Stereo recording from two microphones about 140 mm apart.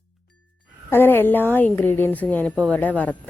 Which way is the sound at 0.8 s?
15° left (ahead or behind).